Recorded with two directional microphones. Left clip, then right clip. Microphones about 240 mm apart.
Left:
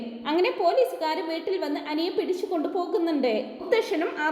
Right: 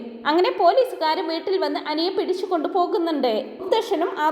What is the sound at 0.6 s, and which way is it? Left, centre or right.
Speech, centre.